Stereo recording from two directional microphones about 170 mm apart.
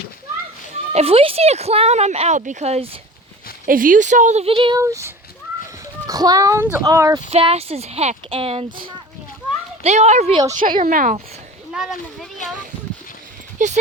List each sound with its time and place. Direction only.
0.9 s speech: 35° right (ahead or behind)
3.7 s a woman's voice: 55° right (ahead or behind); by 4.8 s 30° right (ahead or behind)
4.8 s a child's voice: 15° right (ahead or behind)
7.3 s speech: 35° right (ahead or behind)
9.8 s speech: 40° right (ahead or behind)
10.6 s a woman's voice: 50° right (ahead or behind)
11.7 s speech: 5° right (ahead or behind)
13.6 s a woman's voice: 45° right (ahead or behind)